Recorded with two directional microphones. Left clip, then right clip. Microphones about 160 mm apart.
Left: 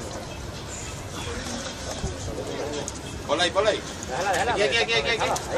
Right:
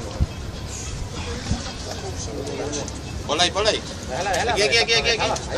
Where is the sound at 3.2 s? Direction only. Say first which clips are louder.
Right 2 dB; 40° right (ahead or behind).